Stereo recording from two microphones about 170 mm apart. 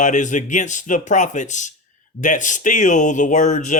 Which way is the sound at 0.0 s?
45° left (ahead or behind).